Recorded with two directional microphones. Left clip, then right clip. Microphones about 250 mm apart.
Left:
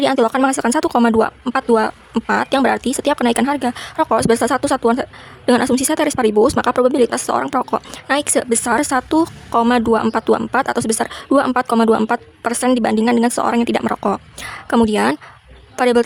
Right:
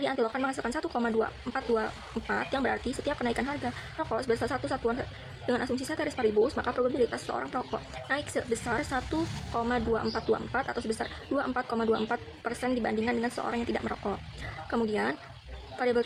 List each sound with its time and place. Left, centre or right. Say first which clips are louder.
0.0 s speech: left 15 dB; left